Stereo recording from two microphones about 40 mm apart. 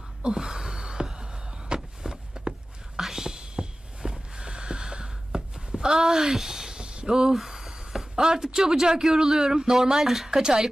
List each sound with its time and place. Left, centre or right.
0.2 s gasp: centre
1.7 s a sound: right
8.1 s speech: centre